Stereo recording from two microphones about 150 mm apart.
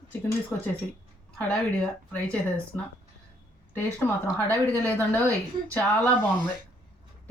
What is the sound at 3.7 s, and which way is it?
Speech, 15° left (ahead or behind).